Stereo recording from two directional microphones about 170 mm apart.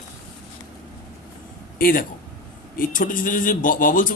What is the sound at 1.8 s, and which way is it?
A man's voice, 55° left (ahead or behind).